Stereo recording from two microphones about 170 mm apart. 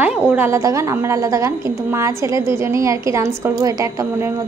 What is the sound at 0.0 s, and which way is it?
A woman's voice, 15° right (ahead or behind).